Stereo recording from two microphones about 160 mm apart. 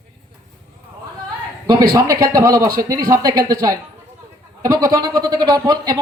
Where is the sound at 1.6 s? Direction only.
25° right (ahead or behind).